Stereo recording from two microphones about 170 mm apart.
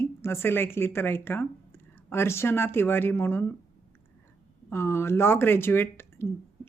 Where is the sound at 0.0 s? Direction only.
15° left (ahead or behind).